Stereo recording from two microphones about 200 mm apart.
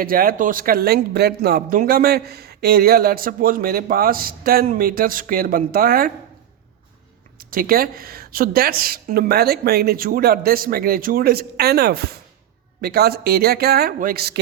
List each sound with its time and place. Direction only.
0.0 s speech: 45° right (ahead or behind)
7.3 s speech: 45° right (ahead or behind)